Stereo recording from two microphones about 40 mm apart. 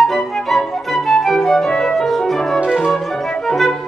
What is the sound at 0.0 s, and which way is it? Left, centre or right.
Flute, centre.